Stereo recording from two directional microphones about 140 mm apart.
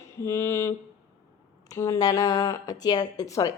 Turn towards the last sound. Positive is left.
turn(degrees=25)  # may be behind; listen again after turning